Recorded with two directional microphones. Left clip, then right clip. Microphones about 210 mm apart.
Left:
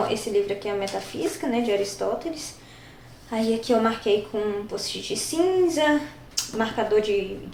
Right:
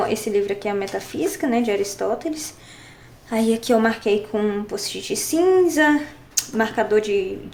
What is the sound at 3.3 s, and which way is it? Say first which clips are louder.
A woman's voice: right 4 dB; 45° right (ahead or behind).